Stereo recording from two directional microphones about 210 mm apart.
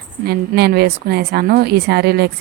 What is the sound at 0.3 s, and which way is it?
A woman's voice, 50° right (ahead or behind).